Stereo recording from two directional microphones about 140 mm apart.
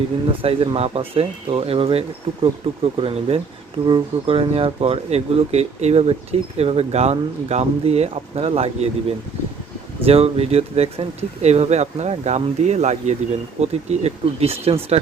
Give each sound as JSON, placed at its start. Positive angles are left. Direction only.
{"t": 0.4, "sound": "speech", "side_deg": -40}